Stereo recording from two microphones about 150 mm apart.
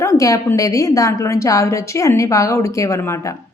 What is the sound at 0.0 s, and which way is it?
A woman's voice, 20° left (ahead or behind).